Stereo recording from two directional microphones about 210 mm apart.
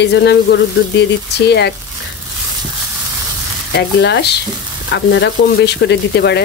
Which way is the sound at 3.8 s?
55° left (ahead or behind).